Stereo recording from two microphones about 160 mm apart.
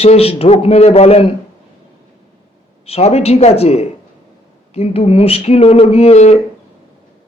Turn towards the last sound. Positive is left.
turn(degrees=40)  # may be behind; listen again after turning